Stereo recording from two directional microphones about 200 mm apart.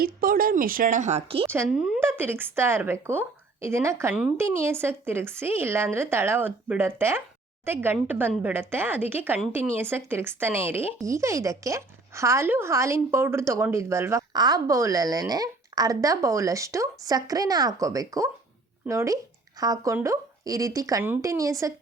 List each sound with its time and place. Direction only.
0.0 s a woman's voice: 45° right (ahead or behind)
1.5 s a woman's voice: 10° right (ahead or behind)